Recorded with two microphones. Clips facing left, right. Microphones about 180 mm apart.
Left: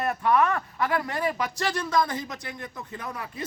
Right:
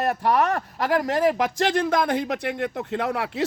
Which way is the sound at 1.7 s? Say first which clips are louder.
Right 5 dB; 55° right (ahead or behind).